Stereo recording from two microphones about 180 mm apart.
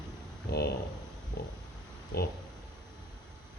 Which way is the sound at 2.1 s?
65° left (ahead or behind).